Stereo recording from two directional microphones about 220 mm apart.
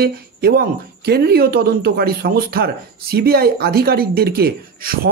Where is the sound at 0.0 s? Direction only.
45° right (ahead or behind).